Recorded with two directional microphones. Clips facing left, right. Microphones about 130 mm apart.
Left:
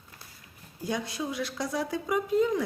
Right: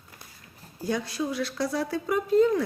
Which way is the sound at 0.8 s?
20° left (ahead or behind).